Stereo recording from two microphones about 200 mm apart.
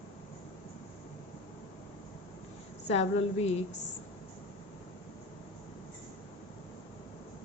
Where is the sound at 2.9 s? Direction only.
30° left (ahead or behind).